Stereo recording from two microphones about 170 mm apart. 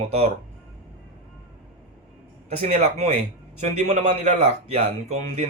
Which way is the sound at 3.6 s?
40° right (ahead or behind).